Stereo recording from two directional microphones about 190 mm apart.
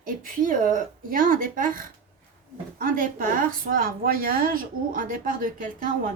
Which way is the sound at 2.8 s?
45° right (ahead or behind).